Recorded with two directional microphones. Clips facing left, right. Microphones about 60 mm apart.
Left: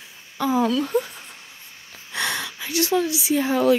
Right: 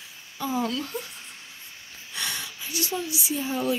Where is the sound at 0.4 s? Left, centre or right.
Left.